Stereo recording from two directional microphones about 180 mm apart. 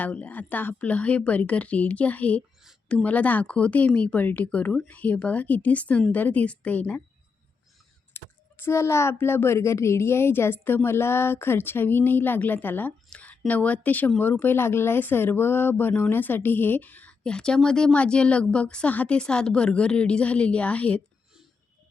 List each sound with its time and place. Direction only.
0.0 s speech: 10° left (ahead or behind)
8.1 s speech: 15° left (ahead or behind)